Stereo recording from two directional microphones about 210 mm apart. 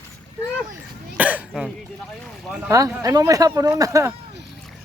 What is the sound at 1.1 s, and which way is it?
Cough, 5° right (ahead or behind).